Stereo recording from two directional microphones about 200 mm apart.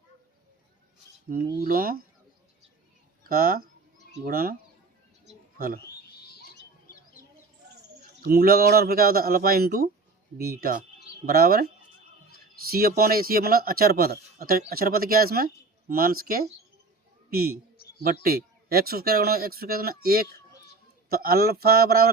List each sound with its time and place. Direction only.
1.5 s speech: 45° right (ahead or behind)
3.2 s speech: 45° right (ahead or behind)
5.2 s a sound: 45° right (ahead or behind)
8.3 s speech: 50° right (ahead or behind)
13.0 s speech: 50° right (ahead or behind)